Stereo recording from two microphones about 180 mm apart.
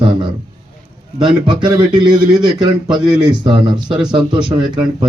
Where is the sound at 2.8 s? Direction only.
5° right (ahead or behind).